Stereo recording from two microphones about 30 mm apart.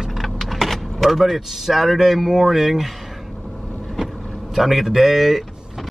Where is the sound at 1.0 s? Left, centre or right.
Centre.